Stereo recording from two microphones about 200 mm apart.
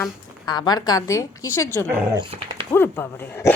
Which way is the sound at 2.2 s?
25° right (ahead or behind).